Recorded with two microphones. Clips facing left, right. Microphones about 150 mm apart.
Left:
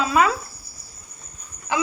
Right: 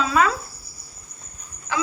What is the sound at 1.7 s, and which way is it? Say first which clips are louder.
Speech: left 2 dB; 15° left (ahead or behind).